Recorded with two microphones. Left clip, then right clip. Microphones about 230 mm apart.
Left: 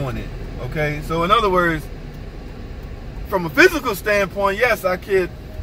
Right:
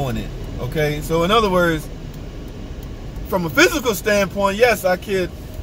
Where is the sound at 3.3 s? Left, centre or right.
Centre.